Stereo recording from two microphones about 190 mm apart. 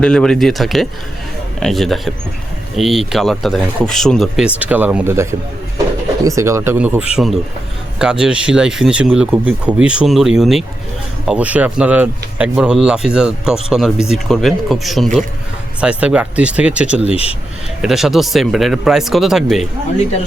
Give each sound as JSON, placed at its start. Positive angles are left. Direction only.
{"t": 0.0, "sound": "speech", "side_deg": 5}
{"t": 17.1, "sound": "speech", "side_deg": 30}
{"t": 17.8, "sound": "speech", "side_deg": 0}